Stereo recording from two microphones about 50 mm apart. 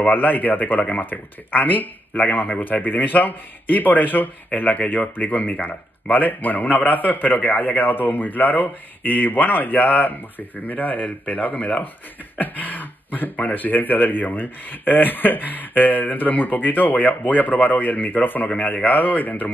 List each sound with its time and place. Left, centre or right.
0.0 s speech: left